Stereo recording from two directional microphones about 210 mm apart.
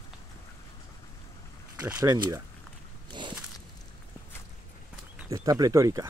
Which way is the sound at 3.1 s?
20° right (ahead or behind).